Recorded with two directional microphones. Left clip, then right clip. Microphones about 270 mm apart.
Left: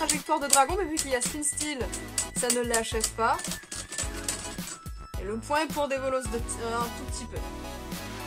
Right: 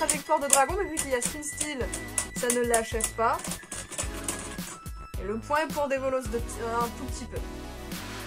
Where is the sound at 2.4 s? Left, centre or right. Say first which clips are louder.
Right 2 dB; left.